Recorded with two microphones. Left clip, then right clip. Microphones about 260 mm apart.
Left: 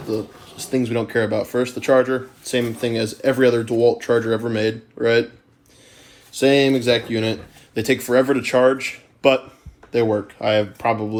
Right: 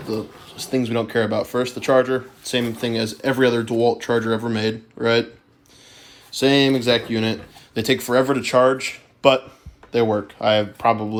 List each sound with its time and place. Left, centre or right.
0.1 s speech: right
6.4 s speech: right